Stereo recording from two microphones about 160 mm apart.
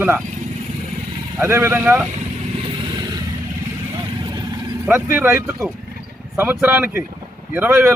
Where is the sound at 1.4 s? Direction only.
15° right (ahead or behind).